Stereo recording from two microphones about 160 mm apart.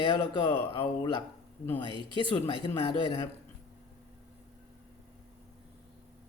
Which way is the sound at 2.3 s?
30° left (ahead or behind).